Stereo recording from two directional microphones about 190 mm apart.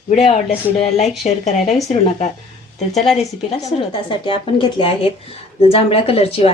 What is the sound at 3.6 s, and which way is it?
A woman's voice, 25° left (ahead or behind).